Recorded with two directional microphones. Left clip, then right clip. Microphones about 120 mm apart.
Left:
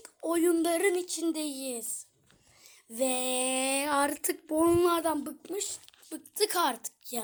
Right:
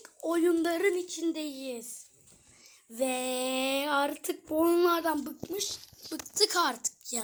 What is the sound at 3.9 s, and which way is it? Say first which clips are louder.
Speech: left 1 dB; 20° left (ahead or behind).